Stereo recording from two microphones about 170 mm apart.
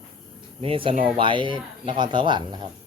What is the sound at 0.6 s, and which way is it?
Speech, 30° right (ahead or behind).